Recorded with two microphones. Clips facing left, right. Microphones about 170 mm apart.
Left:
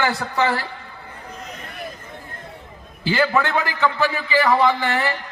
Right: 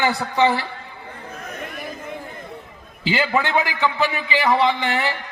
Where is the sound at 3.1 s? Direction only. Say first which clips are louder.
Left 1 dB; 15° right (ahead or behind).